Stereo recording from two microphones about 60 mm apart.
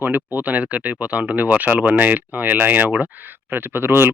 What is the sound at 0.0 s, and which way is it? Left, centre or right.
Speech, right.